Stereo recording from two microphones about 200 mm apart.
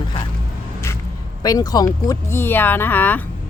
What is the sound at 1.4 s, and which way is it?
Speech, 20° left (ahead or behind).